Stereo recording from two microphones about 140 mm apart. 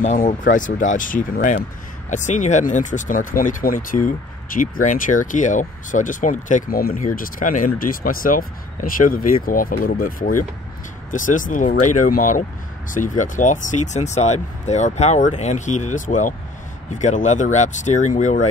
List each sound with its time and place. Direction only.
0.0 s speech: 70° left (ahead or behind)
2.0 s speech: 60° left (ahead or behind); by 7.1 s 90° left
7.2 s speech: 70° left (ahead or behind); by 10.3 s 90° left
11.1 s speech: 70° left (ahead or behind)